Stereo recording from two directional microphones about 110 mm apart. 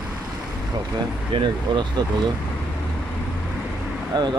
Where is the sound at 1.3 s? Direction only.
45° right (ahead or behind).